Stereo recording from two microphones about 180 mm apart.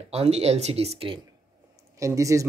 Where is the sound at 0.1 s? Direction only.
35° right (ahead or behind).